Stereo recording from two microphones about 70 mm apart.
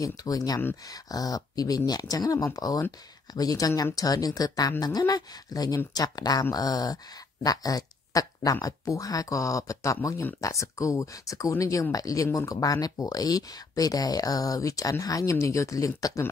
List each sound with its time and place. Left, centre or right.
0.0 s speech: left